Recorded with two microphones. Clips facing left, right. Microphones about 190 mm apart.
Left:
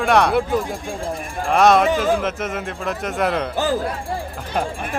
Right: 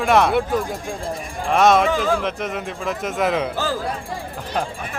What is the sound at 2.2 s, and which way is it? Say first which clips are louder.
A man's voice: left 1 dB; centre (ahead or behind).